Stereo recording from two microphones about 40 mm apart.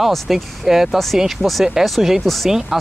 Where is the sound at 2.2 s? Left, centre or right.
Centre.